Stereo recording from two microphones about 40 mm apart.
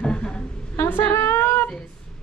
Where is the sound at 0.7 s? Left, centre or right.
Left.